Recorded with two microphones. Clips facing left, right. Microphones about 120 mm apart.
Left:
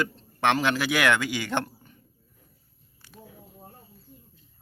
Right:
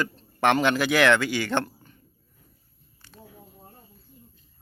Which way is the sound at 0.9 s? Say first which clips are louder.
Right 5 dB; 10° left (ahead or behind).